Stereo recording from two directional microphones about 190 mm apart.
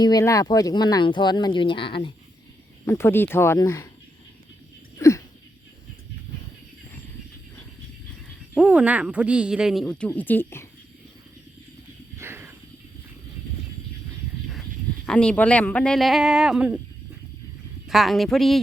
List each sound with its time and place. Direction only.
0.0 s speech: 20° left (ahead or behind)
2.8 s speech: 15° left (ahead or behind)
4.9 s a sound: 15° left (ahead or behind)
8.5 s speech: 5° right (ahead or behind); by 10.7 s 10° left (ahead or behind)
12.1 s a sound: 15° right (ahead or behind)
15.0 s speech: 5° left (ahead or behind)
17.8 s speech: centre (ahead or behind)